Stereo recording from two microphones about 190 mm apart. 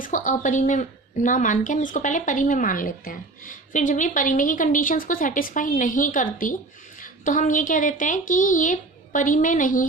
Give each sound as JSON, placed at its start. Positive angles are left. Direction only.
{"t": 0.0, "sound": "speech", "side_deg": 45}